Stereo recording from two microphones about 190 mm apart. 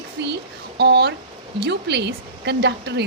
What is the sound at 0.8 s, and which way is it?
Speech, 60° right (ahead or behind).